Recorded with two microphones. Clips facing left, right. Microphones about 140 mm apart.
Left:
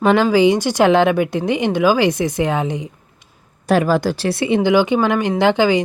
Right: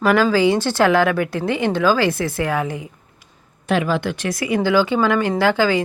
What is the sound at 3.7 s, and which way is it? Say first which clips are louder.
A woman's voice: left 4 dB; 40° left (ahead or behind).